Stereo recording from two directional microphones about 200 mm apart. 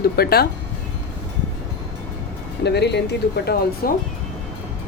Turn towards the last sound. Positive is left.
turn(degrees=50)  # may be behind; listen again after turning